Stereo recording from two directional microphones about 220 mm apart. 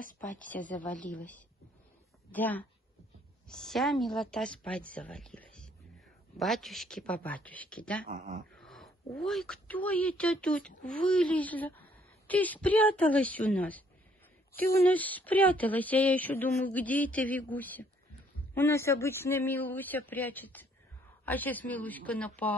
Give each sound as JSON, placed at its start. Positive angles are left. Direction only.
{"t": 0.5, "sound": "speech", "side_deg": 35}
{"t": 1.1, "sound": "a woman's voice", "side_deg": 5}